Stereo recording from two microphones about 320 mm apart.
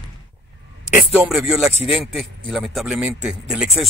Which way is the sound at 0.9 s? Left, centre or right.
Centre.